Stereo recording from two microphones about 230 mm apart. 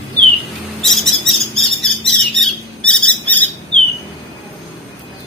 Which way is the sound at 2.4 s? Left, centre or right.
Centre.